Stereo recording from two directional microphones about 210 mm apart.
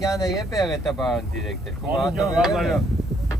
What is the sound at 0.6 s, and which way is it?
Speech, centre (ahead or behind).